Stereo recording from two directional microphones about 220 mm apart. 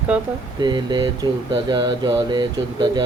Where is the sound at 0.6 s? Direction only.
20° right (ahead or behind).